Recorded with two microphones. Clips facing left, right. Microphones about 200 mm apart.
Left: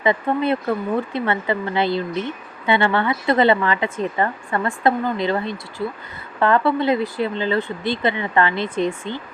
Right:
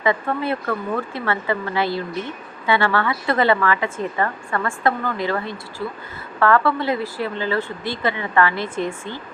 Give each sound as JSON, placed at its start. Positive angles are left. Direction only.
{"t": 0.0, "sound": "speech", "side_deg": 25}